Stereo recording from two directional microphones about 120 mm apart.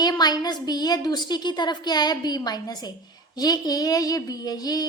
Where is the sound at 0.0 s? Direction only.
35° left (ahead or behind).